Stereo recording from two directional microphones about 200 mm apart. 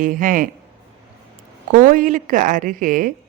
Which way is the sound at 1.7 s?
40° right (ahead or behind).